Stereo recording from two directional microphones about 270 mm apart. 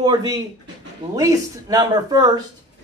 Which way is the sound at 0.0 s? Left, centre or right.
Centre.